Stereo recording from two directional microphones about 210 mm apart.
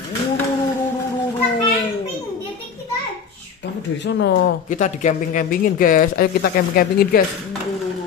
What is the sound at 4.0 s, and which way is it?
Speech, 55° left (ahead or behind).